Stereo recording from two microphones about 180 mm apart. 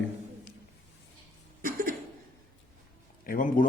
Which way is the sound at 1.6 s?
50° right (ahead or behind).